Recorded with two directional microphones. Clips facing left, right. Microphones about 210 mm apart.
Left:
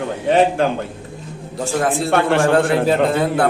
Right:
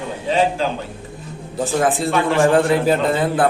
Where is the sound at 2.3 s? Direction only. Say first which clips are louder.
Right 3 dB; centre (ahead or behind).